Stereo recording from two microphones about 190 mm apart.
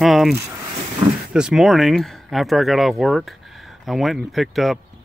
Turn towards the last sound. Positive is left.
turn(degrees=0)  # may be behind; listen again after turning